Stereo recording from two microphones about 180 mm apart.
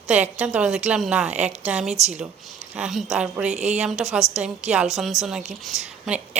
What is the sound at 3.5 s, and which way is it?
Speech, 40° right (ahead or behind).